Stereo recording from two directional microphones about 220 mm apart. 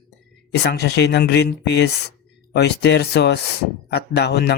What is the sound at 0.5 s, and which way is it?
Speech, 50° left (ahead or behind).